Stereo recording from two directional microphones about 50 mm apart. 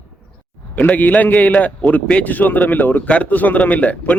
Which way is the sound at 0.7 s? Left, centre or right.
Left.